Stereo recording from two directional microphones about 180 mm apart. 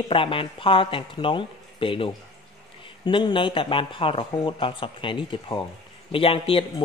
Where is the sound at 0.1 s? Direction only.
30° left (ahead or behind).